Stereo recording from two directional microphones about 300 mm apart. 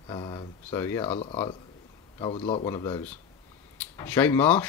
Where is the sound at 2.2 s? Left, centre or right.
Centre.